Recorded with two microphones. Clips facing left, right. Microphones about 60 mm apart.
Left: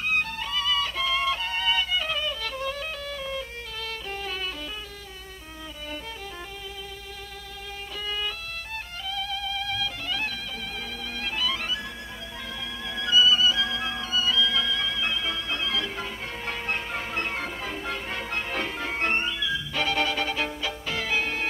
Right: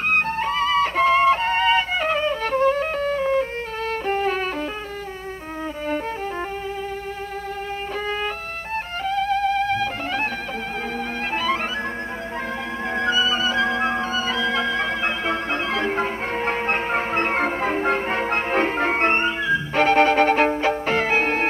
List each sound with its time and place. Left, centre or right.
0.1 s music: right
9.0 s music: right
11.3 s music: right
12.9 s music: right